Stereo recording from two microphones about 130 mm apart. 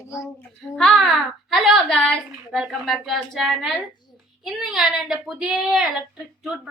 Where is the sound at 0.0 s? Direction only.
25° left (ahead or behind).